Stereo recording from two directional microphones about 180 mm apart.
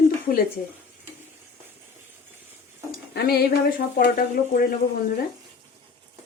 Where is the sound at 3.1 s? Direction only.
60° left (ahead or behind).